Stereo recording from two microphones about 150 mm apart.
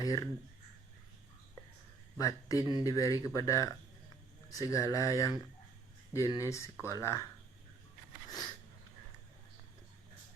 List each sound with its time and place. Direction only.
0.0 s speech: 25° left (ahead or behind)
2.1 s speech: 20° left (ahead or behind)